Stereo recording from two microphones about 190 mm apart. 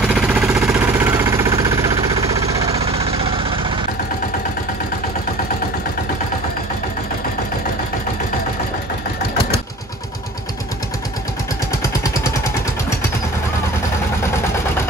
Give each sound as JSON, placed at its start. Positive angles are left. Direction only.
{"t": 0.0, "sound": "a sound", "side_deg": -5}
{"t": 0.7, "sound": "vehicle", "side_deg": -10}
{"t": 2.7, "sound": "engine", "side_deg": -30}